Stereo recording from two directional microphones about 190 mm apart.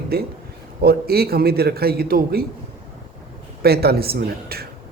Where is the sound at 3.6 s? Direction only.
55° right (ahead or behind).